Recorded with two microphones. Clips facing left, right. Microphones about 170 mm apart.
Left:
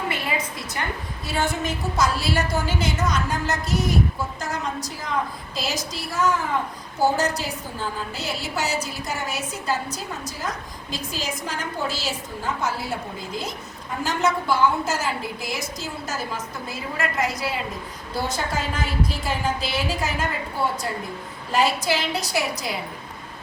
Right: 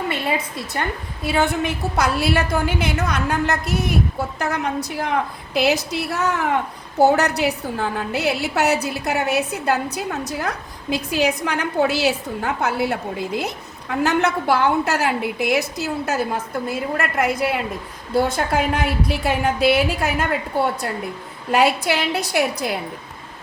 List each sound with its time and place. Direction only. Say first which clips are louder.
1.2 s a woman's voice: right 6 dB; 60° right (ahead or behind)
21.5 s a woman's voice: right 4 dB; 60° right (ahead or behind)